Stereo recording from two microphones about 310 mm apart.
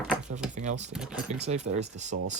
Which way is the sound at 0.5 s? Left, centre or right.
Right.